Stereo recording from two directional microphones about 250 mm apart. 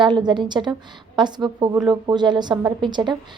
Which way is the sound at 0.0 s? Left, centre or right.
Centre.